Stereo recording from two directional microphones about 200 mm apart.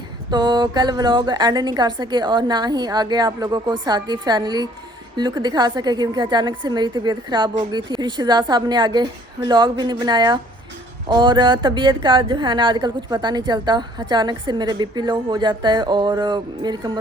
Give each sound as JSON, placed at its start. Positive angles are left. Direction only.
{"t": 0.3, "sound": "speech", "side_deg": -20}